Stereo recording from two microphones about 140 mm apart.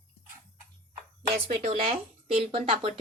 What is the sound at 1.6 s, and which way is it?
Speech, 45° right (ahead or behind).